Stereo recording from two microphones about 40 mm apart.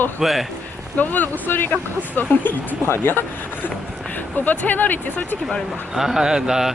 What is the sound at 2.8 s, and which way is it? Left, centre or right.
Speech, left.